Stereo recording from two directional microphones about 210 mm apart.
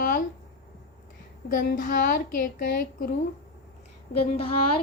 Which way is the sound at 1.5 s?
40° left (ahead or behind).